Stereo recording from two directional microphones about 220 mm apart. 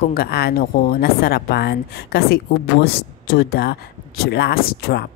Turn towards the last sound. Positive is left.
turn(degrees=45)  # may be behind; listen again after turning